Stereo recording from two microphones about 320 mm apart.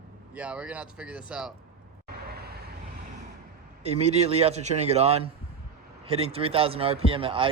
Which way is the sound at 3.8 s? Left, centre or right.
Centre.